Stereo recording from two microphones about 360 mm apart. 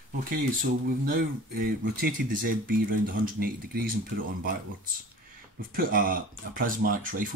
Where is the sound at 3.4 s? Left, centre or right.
Right.